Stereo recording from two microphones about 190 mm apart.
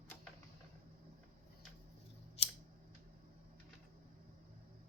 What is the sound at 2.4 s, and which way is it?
Scissors, 35° left (ahead or behind).